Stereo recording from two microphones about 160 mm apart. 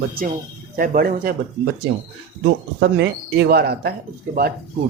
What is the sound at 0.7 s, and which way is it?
Speech, 60° right (ahead or behind).